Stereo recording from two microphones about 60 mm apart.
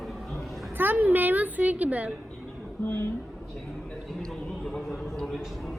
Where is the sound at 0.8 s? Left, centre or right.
Right.